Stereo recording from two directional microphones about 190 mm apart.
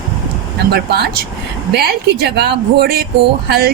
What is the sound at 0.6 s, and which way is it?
Speech, 60° right (ahead or behind).